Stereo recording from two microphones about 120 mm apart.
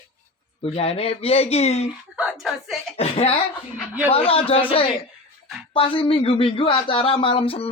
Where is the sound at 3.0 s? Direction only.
60° left (ahead or behind).